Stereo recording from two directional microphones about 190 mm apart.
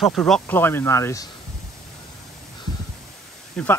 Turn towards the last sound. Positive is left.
turn(degrees=5)  # may be behind; listen again after turning